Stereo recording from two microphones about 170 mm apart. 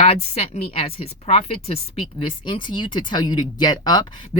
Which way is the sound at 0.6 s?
35° left (ahead or behind).